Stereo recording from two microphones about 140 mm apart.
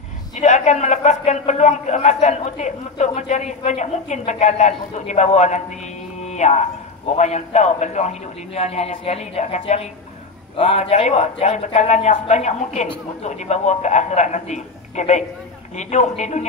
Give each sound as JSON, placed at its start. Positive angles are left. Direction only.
{"t": 0.3, "sound": "a man's voice", "side_deg": 60}
{"t": 6.2, "sound": "a sound", "side_deg": 55}
{"t": 7.2, "sound": "a man's voice", "side_deg": 55}
{"t": 10.5, "sound": "a man's voice", "side_deg": 40}